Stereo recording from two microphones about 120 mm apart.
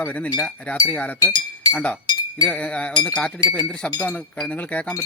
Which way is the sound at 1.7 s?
15° left (ahead or behind).